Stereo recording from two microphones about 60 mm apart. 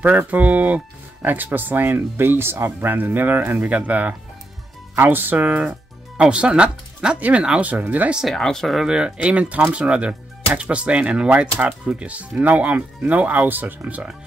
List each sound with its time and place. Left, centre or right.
0.3 s speech: right
5.4 s speech: right
7.2 s speech: right
8.3 s speech: centre
8.7 s speech: centre; by 14.0 s right